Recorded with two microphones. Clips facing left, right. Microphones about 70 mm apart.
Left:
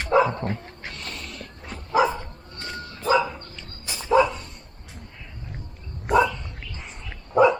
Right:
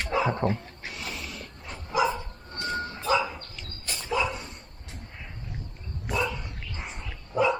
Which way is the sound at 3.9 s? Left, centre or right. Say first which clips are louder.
Left 9 dB; centre.